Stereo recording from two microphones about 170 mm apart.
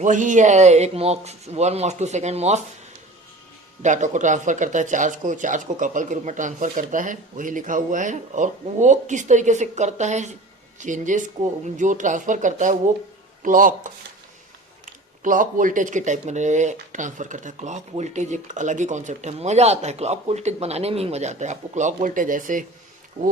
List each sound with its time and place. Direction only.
0.0 s speech: 45° right (ahead or behind)
3.8 s speech: 45° right (ahead or behind)
15.2 s speech: 50° right (ahead or behind)